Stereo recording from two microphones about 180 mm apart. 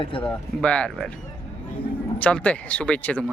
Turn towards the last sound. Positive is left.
turn(degrees=5)  # may be behind; listen again after turning